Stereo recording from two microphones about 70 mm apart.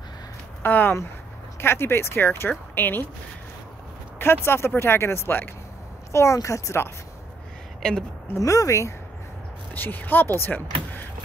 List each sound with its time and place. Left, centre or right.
0.6 s speech: left
4.2 s speech: left
6.1 s speech: left
8.4 s speech: left
9.8 s speech: left